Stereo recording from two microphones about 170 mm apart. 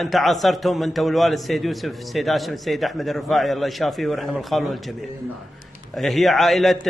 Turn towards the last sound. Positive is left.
turn(degrees=0)  # may be behind; listen again after turning